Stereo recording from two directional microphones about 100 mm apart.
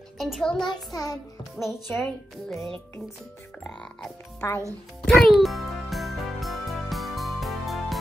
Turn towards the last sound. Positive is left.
turn(degrees=0)  # may be behind; listen again after turning